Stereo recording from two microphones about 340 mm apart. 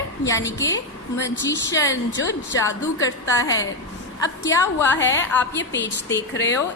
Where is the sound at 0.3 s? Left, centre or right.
Centre.